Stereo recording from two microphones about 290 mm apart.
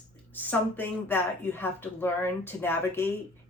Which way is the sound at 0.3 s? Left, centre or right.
Centre.